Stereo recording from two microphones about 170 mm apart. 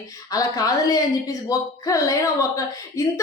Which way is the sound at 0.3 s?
20° left (ahead or behind).